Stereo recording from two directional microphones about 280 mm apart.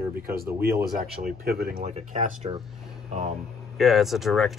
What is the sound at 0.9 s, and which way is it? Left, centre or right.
Speech, right.